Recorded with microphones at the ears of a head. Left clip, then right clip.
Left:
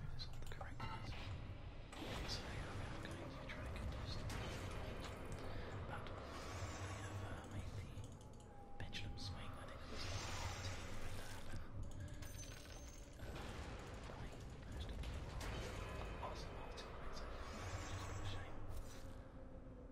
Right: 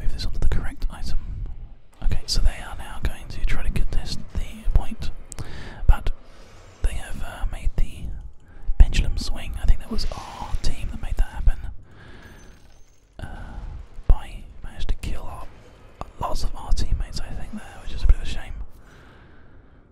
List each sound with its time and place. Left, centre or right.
0.0 s whispering: right